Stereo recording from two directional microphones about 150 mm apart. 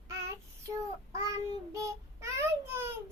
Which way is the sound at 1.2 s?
20° right (ahead or behind).